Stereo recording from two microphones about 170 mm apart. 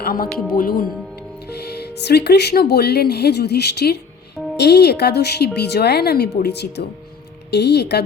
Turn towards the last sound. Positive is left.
turn(degrees=80)